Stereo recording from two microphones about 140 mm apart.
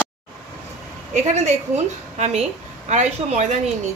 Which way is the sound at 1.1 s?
55° right (ahead or behind).